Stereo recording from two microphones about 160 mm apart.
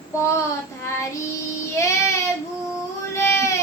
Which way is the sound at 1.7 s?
20° left (ahead or behind).